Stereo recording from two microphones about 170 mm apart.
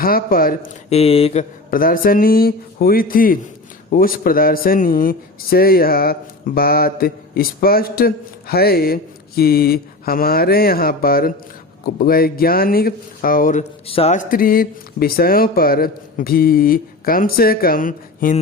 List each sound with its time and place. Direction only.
0.0 s a man's voice: 60° left (ahead or behind)
0.9 s speech: 35° left (ahead or behind)
1.7 s a man's voice: 55° left (ahead or behind)
13.8 s speech: 35° left (ahead or behind)
14.2 s a man's voice: 55° left (ahead or behind)